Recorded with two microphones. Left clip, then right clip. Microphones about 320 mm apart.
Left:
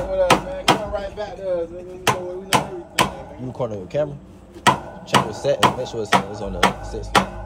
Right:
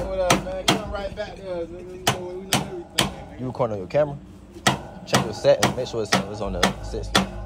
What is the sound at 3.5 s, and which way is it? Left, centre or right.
Speech, centre.